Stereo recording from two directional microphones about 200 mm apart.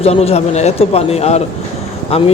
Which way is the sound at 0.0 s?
30° left (ahead or behind).